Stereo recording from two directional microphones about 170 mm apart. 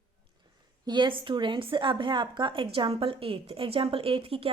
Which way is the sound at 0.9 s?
25° right (ahead or behind).